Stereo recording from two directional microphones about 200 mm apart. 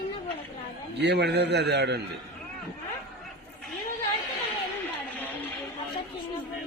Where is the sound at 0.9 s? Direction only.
60° right (ahead or behind).